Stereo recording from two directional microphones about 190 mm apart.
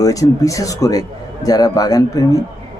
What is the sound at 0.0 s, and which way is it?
Speech, 20° left (ahead or behind).